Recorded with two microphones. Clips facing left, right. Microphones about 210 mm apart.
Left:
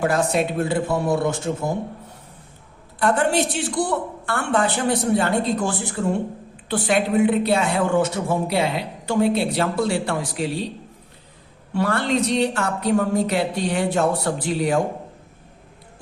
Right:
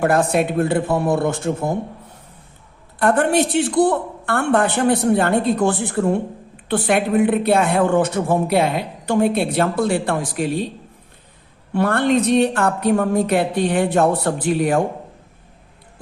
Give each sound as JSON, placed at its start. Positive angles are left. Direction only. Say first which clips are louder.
{"t": 0.0, "sound": "speech", "louder": "right 3 dB", "side_deg": -55}
{"t": 3.0, "sound": "speech", "louder": "right 3 dB", "side_deg": -55}
{"t": 11.7, "sound": "speech", "louder": "right 4 dB", "side_deg": -55}